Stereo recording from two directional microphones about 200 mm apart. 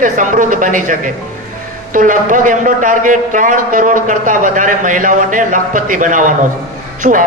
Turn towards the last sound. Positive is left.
turn(degrees=-40)  # may be behind; listen again after turning